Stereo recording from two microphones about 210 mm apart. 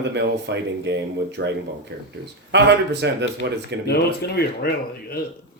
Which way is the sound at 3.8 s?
50° left (ahead or behind).